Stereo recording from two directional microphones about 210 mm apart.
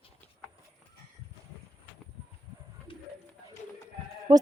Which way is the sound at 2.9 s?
25° left (ahead or behind).